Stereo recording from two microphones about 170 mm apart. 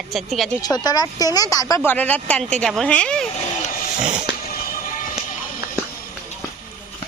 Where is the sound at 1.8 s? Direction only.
10° left (ahead or behind).